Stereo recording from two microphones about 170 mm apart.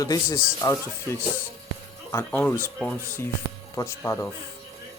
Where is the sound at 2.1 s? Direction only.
10° left (ahead or behind).